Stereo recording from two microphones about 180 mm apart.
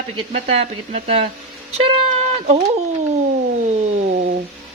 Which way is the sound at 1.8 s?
35° right (ahead or behind).